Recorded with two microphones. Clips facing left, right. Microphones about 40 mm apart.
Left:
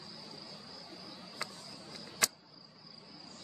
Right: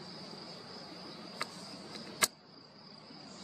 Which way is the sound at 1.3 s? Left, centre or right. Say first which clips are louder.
Right 1 dB; right.